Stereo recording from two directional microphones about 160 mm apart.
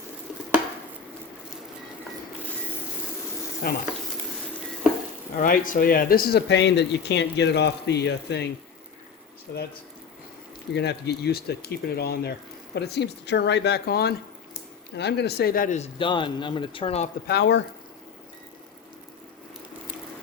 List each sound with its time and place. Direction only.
3.6 s speech: 70° left (ahead or behind)
5.4 s speech: 55° left (ahead or behind); by 8.4 s 90° left
10.8 s speech: 90° left
12.7 s speech: 90° left; by 15.8 s 60° left (ahead or behind)
15.8 s speech: 30° left (ahead or behind)
17.2 s speech: 90° left